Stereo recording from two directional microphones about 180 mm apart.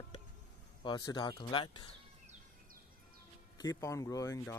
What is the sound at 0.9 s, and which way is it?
Speech, 25° left (ahead or behind).